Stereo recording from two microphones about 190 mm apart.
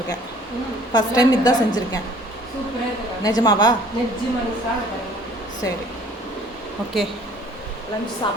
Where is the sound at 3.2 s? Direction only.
20° left (ahead or behind).